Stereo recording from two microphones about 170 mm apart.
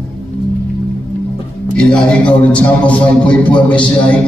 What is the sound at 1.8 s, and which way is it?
A man's voice, 5° left (ahead or behind).